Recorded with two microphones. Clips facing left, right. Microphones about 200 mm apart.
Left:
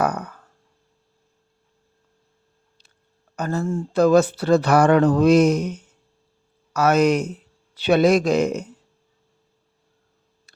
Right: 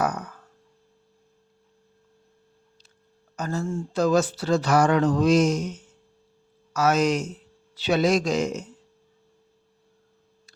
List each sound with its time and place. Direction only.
0.0 s speech: 60° left (ahead or behind)
3.3 s speech: 60° left (ahead or behind)